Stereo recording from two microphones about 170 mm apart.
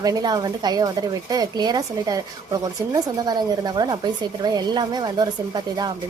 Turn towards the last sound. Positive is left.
turn(degrees=-25)  # may be behind; listen again after turning